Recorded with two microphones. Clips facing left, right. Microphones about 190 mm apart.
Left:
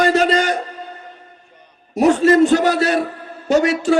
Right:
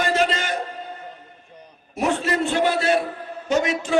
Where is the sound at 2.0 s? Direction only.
40° left (ahead or behind).